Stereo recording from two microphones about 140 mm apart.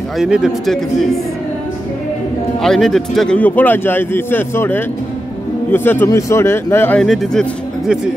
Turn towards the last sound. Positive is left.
turn(degrees=0)  # may be behind; listen again after turning